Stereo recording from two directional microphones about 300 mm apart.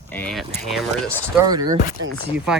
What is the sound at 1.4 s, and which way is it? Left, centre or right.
Speech, centre.